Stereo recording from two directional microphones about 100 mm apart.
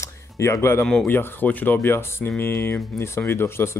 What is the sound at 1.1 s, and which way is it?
Speech, 20° left (ahead or behind).